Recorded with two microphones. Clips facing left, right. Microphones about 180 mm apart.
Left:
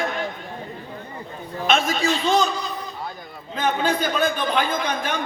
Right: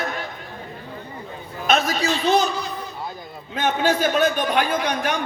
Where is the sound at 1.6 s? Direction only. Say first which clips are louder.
Right 1 dB; 40° right (ahead or behind).